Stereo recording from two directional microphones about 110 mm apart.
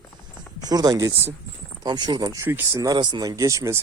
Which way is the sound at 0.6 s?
35° right (ahead or behind).